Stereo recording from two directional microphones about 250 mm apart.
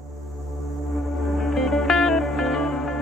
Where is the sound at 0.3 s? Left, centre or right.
Centre.